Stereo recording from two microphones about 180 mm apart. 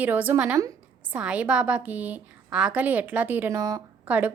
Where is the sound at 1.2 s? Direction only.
5° right (ahead or behind).